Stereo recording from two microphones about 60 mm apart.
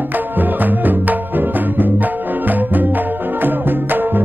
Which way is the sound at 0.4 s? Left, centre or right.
Right.